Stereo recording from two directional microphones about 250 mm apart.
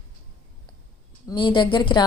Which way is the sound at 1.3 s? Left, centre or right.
Centre.